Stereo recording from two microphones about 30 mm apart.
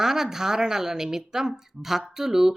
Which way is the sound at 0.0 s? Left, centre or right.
Centre.